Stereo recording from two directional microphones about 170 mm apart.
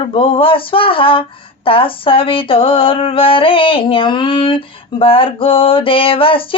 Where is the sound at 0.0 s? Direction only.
30° left (ahead or behind).